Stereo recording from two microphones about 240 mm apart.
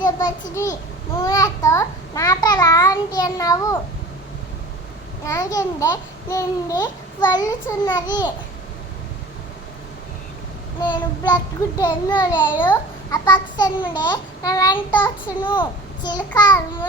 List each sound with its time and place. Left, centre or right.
0.5 s a child's voice: centre
5.2 s a child's voice: centre
10.8 s a child's voice: centre